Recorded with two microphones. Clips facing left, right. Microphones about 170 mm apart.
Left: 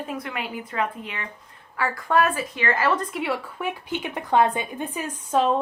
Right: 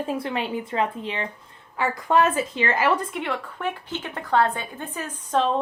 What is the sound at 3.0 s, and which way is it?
A woman's voice, centre (ahead or behind).